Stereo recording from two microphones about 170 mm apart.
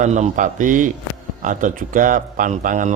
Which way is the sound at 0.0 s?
45° right (ahead or behind).